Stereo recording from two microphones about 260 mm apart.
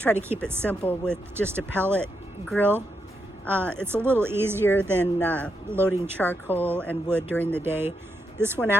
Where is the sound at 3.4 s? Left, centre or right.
Centre.